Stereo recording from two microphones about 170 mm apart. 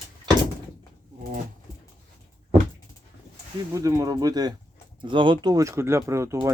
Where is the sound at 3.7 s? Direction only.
20° right (ahead or behind).